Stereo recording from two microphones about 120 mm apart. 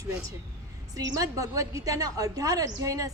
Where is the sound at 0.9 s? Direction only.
30° right (ahead or behind).